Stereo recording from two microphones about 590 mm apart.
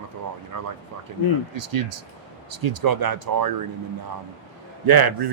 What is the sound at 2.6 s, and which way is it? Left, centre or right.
Speech, right.